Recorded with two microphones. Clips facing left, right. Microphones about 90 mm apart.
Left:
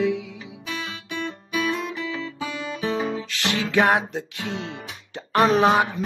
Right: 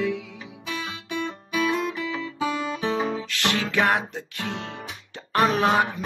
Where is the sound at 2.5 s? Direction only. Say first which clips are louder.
Even; 30° right (ahead or behind).